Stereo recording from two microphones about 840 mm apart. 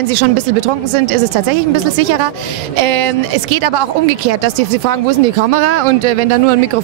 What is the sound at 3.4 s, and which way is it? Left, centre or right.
Speech, right.